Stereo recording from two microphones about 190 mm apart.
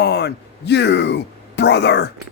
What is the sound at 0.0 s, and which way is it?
Speech, 60° left (ahead or behind).